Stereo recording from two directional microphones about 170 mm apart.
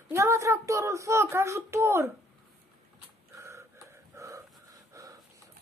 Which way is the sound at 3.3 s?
15° right (ahead or behind).